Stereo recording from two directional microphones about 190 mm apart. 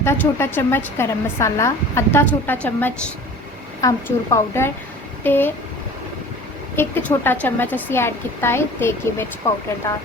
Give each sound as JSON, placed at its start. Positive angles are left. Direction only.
{"t": 0.0, "sound": "a woman's voice", "side_deg": 15}
{"t": 6.7, "sound": "a woman's voice", "side_deg": 10}